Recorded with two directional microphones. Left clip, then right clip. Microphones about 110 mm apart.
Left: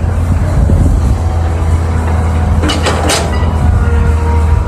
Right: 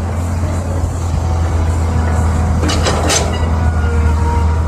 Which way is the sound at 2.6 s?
25° left (ahead or behind).